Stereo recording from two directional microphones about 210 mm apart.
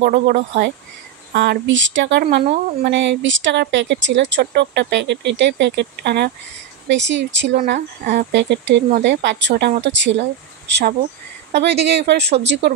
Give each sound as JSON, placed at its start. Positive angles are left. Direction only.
{"t": 0.0, "sound": "speech", "side_deg": -45}
{"t": 7.5, "sound": "speech", "side_deg": -40}
{"t": 8.3, "sound": "speech", "side_deg": -60}